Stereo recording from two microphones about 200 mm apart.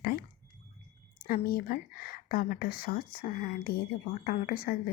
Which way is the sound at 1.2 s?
45° left (ahead or behind).